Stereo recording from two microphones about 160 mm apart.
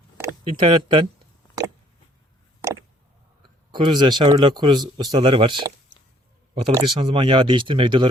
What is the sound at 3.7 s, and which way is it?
Speech, 30° right (ahead or behind).